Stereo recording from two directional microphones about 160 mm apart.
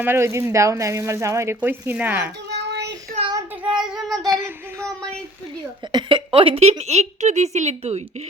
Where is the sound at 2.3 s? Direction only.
90° right.